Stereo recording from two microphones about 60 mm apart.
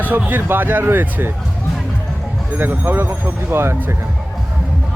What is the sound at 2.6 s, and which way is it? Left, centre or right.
Speech, right.